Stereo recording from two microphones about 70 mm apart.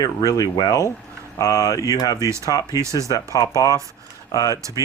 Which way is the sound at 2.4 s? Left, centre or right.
Left.